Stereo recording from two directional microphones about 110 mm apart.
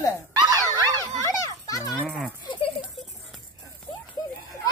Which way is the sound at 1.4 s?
30° left (ahead or behind).